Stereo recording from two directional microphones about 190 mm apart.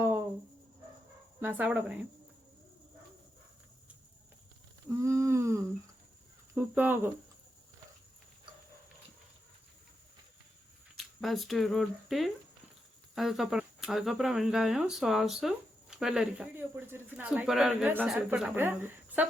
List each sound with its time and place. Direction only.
1.4 s speech: 10° right (ahead or behind)
4.9 s a sound: 15° right (ahead or behind)
6.5 s speech: 10° right (ahead or behind)
10.9 s speech: centre (ahead or behind)